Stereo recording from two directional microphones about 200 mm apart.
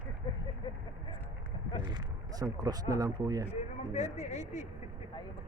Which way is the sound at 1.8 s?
20° right (ahead or behind).